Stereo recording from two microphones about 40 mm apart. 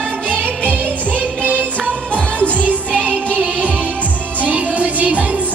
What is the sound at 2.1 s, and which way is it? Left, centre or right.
Music, left.